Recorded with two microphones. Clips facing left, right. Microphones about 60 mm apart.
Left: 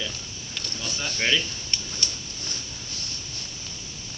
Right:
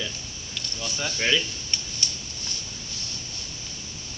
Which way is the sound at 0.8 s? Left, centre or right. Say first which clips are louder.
Right 2 dB; centre.